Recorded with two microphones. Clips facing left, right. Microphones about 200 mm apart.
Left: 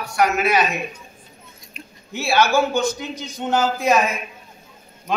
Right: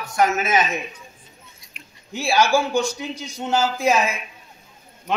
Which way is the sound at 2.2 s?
15° right (ahead or behind).